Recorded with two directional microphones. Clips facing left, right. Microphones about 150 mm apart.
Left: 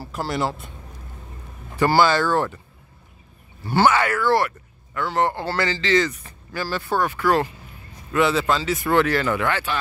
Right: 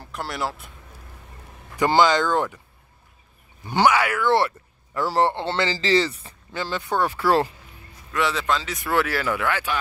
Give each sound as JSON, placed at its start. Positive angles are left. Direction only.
{"t": 0.0, "sound": "speech", "side_deg": 0}
{"t": 1.8, "sound": "speech", "side_deg": -15}
{"t": 3.6, "sound": "speech", "side_deg": -15}
{"t": 7.1, "sound": "speech", "side_deg": -30}
{"t": 8.1, "sound": "speech", "side_deg": 5}